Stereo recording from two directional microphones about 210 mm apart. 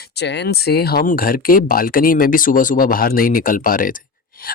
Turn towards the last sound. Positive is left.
turn(degrees=40)  # may be behind; listen again after turning